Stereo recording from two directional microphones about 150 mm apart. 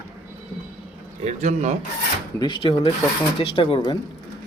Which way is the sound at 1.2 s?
45° right (ahead or behind).